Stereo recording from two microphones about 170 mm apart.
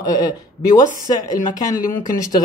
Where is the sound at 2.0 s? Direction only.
50° left (ahead or behind).